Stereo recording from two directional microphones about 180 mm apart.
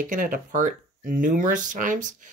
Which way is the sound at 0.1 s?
50° right (ahead or behind).